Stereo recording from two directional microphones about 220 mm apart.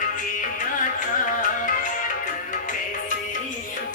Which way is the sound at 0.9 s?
35° left (ahead or behind).